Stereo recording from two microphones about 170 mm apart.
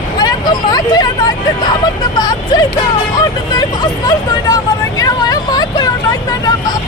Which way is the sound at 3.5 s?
25° left (ahead or behind).